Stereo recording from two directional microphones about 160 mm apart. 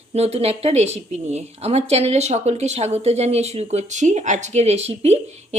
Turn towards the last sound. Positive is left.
turn(degrees=-40)  # may be behind; listen again after turning